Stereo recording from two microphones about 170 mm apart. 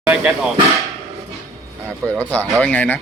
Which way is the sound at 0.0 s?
5° right (ahead or behind).